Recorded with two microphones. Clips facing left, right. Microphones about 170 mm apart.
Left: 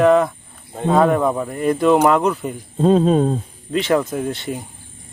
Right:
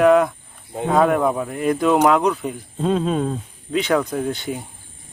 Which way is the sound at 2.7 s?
35° left (ahead or behind).